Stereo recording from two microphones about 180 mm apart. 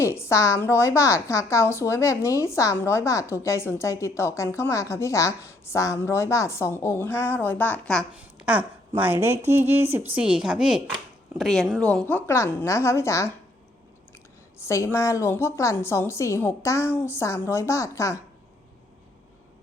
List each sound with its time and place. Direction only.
0.0 s a woman's voice: 15° left (ahead or behind)
8.2 s a sound: 10° right (ahead or behind)
9.0 s a woman's voice: 10° right (ahead or behind); by 13.3 s 15° left (ahead or behind)
14.6 s a woman's voice: 15° left (ahead or behind)